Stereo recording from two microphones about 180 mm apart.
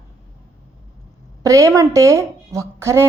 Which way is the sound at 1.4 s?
15° right (ahead or behind).